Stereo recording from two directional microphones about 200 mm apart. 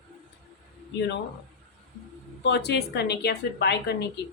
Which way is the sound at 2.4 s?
55° left (ahead or behind).